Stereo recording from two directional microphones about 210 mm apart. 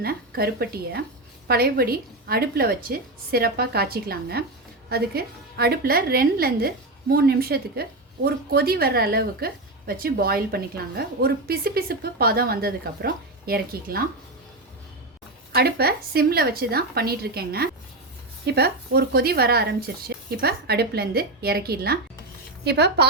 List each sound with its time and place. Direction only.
0.0 s a woman's voice: 45° right (ahead or behind)
15.5 s a woman's voice: 50° right (ahead or behind)